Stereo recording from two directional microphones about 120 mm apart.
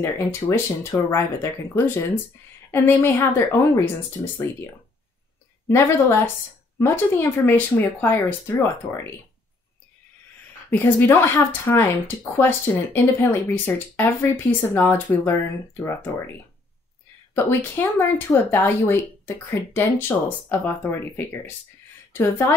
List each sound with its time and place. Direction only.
0.0 s speech: 20° left (ahead or behind)
5.7 s speech: 20° left (ahead or behind)
10.7 s speech: 15° left (ahead or behind)
17.3 s speech: 20° left (ahead or behind)